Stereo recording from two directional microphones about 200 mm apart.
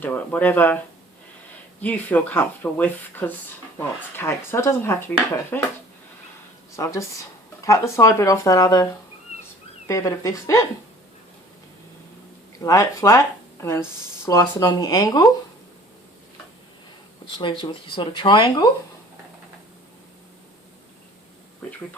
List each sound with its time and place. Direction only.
0.0 s speech: 10° left (ahead or behind)
1.8 s speech: 10° left (ahead or behind)
6.7 s speech: 15° left (ahead or behind)
12.5 s speech: 15° left (ahead or behind)
17.3 s speech: 25° left (ahead or behind)